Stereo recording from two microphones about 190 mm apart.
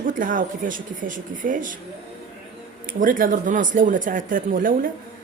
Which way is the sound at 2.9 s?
45° right (ahead or behind).